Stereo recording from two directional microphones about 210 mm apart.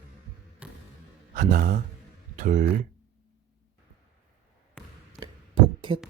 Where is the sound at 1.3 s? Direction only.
45° right (ahead or behind).